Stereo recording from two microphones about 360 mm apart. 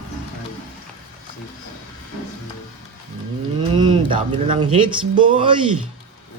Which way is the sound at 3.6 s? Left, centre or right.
Centre.